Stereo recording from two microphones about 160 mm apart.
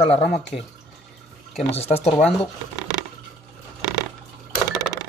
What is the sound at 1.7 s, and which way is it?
Speech, 40° left (ahead or behind).